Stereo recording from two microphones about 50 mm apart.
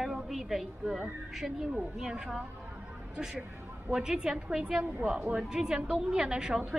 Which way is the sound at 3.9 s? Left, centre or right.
Centre.